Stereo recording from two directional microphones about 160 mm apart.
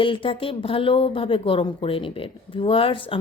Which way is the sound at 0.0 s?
35° left (ahead or behind).